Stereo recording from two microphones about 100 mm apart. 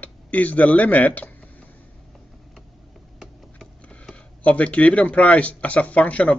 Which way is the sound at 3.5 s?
10° left (ahead or behind).